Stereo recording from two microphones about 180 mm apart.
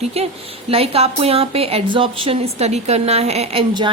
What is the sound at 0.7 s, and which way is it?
A woman's voice, 35° right (ahead or behind).